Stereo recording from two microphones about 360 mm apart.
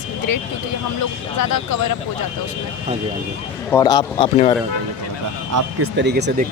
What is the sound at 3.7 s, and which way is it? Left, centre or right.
Speech, centre.